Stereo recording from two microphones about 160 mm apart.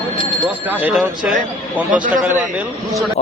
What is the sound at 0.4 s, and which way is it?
Speech, 10° right (ahead or behind).